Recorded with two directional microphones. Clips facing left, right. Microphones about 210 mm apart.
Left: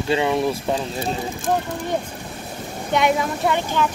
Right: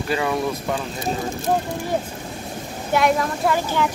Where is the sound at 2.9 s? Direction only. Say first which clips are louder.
Even; centre (ahead or behind).